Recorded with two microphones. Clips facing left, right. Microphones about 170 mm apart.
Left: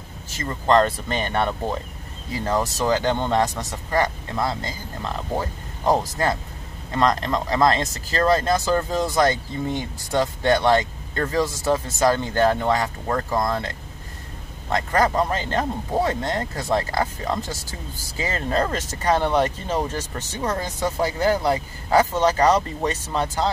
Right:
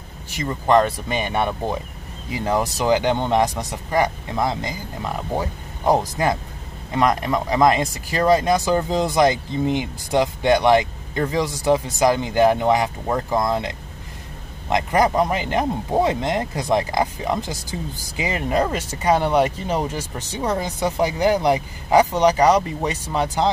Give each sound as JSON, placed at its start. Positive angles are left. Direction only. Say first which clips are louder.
{"t": 0.3, "sound": "speech", "louder": "right 2 dB", "side_deg": -15}